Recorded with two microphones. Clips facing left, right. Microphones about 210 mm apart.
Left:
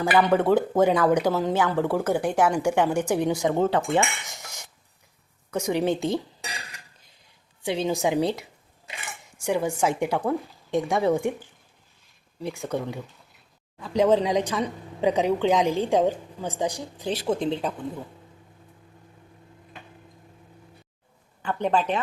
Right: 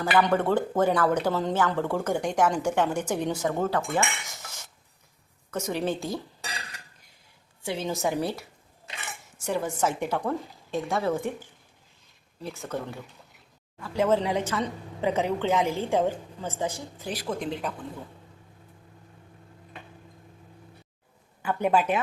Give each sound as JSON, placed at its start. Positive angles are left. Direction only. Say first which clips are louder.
{"t": 0.2, "sound": "a woman's voice", "louder": "left 3 dB", "side_deg": 10}
{"t": 3.1, "sound": "cutlery", "louder": "left 4 dB", "side_deg": 10}
{"t": 5.5, "sound": "a woman's voice", "louder": "left 4 dB", "side_deg": 15}
{"t": 7.6, "sound": "a woman's voice", "louder": "left 4 dB", "side_deg": 15}
{"t": 9.5, "sound": "a woman's voice", "louder": "left 3 dB", "side_deg": 10}
{"t": 21.4, "sound": "speech", "louder": "even", "side_deg": -10}